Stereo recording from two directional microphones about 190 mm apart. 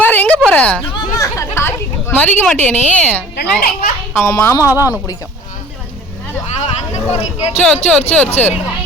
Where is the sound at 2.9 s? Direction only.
5° left (ahead or behind).